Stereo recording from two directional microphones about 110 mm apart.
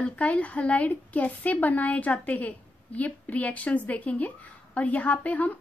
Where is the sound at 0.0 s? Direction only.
15° left (ahead or behind).